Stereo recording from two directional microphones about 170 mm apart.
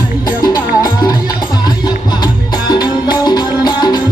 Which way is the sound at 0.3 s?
25° left (ahead or behind).